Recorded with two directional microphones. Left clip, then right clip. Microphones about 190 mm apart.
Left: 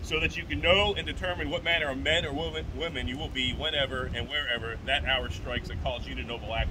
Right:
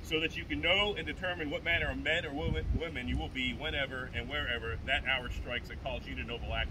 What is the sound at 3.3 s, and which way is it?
Speech, 65° left (ahead or behind).